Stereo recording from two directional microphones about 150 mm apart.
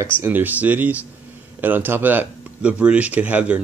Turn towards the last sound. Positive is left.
turn(degrees=-10)  # may be behind; listen again after turning